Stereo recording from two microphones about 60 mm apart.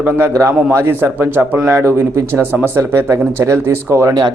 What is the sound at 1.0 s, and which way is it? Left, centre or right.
Speech, right.